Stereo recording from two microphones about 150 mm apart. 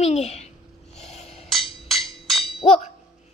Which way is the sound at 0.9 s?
45° left (ahead or behind).